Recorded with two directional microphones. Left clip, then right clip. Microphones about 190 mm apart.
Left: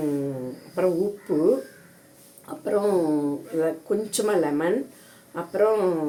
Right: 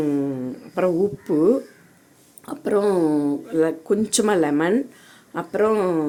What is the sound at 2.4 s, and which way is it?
Speech, 60° right (ahead or behind).